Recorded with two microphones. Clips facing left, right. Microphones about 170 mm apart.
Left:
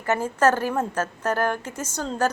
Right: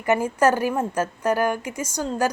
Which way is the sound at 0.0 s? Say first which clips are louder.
Right 2 dB; 15° right (ahead or behind).